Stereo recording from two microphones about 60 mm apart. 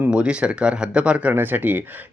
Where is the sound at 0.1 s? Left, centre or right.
Centre.